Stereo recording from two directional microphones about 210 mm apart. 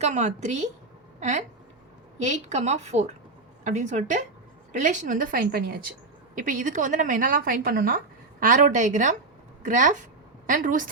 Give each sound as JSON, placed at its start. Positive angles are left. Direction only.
{"t": 0.0, "sound": "a woman's voice", "side_deg": -35}